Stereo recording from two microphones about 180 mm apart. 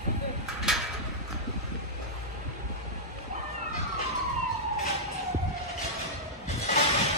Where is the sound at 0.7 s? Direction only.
Centre (ahead or behind).